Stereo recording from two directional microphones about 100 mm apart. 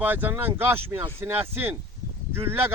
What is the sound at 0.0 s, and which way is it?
Speech, 20° right (ahead or behind).